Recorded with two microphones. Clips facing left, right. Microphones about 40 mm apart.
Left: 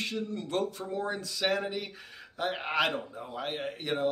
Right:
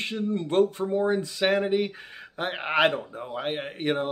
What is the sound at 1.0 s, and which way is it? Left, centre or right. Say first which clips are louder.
A man's voice: right 8 dB; right.